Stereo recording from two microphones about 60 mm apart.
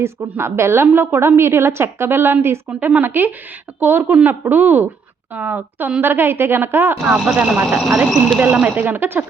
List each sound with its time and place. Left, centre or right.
0.3 s a woman's voice: right
2.6 s a woman's voice: right
7.1 s speech: right
7.9 s speech: centre
8.4 s a woman's voice: right